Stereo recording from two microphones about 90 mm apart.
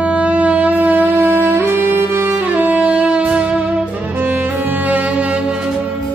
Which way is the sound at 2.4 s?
15° right (ahead or behind).